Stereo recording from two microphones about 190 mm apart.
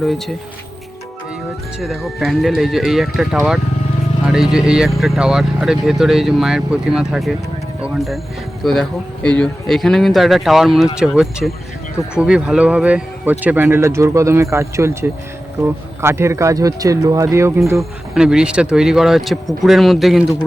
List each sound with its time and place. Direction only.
0.0 s speech: centre (ahead or behind)
1.8 s speech: centre (ahead or behind)
4.5 s speech: 5° right (ahead or behind)
17.7 s speech: 5° right (ahead or behind)